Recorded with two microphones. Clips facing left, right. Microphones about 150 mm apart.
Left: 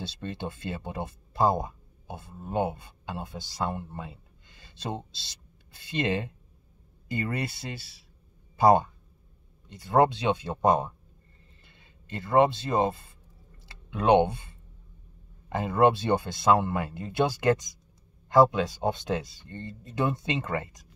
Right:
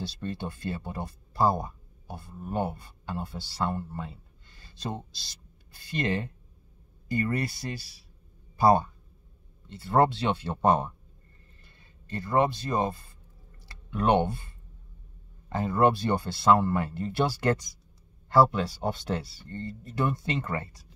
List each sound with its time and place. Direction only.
0.0 s speech: 20° left (ahead or behind)
15.5 s speech: 20° left (ahead or behind)